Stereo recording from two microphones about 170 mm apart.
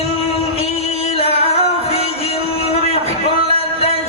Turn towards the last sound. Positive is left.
turn(degrees=35)  # may be behind; listen again after turning